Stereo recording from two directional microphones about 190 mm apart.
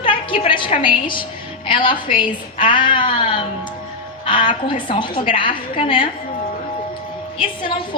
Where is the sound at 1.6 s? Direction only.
25° left (ahead or behind).